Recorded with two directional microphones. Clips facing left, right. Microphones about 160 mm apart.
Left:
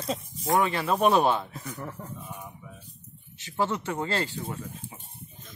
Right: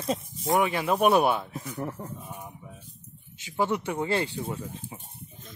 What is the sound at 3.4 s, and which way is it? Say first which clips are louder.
Speech: right 1 dB; 15° right (ahead or behind).